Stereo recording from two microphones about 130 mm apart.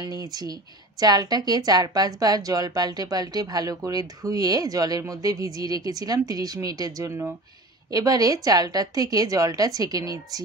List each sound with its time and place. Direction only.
0.0 s a woman's voice: 30° right (ahead or behind)